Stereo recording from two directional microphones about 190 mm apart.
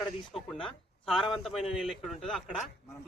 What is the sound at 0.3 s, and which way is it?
Speech, 5° left (ahead or behind).